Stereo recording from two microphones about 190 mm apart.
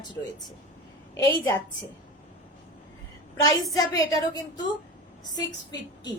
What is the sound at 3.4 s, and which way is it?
A woman's voice, 20° left (ahead or behind).